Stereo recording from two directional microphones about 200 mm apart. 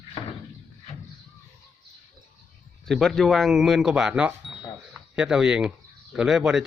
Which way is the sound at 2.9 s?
Centre (ahead or behind).